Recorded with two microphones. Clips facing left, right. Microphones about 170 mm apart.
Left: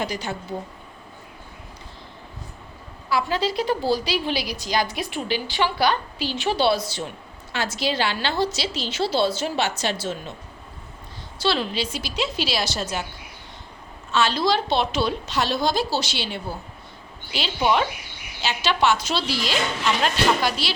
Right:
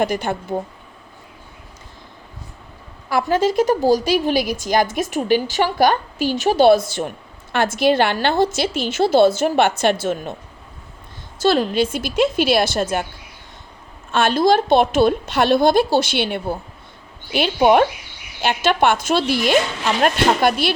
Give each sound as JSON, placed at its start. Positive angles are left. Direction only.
{"t": 0.0, "sound": "a woman's voice", "side_deg": -55}
{"t": 3.1, "sound": "a woman's voice", "side_deg": -50}
{"t": 11.3, "sound": "a woman's voice", "side_deg": -45}
{"t": 14.1, "sound": "a woman's voice", "side_deg": -50}